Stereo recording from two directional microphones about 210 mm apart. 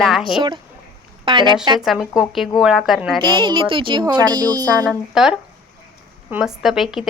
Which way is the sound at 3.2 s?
20° right (ahead or behind).